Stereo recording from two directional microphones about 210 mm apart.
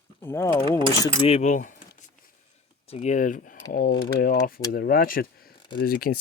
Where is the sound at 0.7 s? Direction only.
25° right (ahead or behind).